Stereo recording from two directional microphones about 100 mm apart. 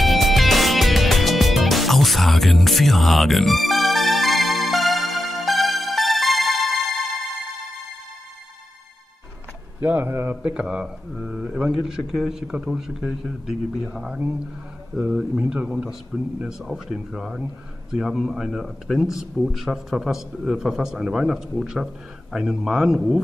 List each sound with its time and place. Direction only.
0.0 s music: centre (ahead or behind)
9.8 s speech: 20° right (ahead or behind)
10.3 s a man's voice: 10° right (ahead or behind)